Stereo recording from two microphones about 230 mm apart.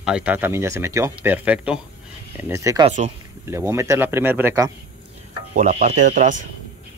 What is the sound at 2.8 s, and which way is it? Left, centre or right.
Speech, right.